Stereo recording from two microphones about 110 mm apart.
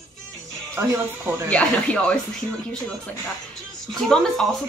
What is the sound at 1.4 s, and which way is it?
Speech, 10° left (ahead or behind).